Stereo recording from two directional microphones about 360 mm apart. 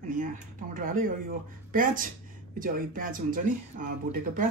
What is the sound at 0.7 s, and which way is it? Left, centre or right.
Speech, right.